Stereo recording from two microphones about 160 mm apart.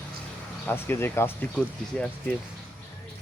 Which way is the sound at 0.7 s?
15° left (ahead or behind).